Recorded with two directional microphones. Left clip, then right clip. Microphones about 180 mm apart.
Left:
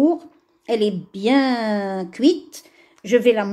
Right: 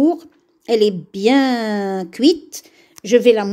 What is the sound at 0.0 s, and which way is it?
A woman's voice, 40° right (ahead or behind).